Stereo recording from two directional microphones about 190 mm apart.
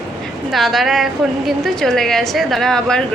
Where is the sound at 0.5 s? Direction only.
Centre (ahead or behind).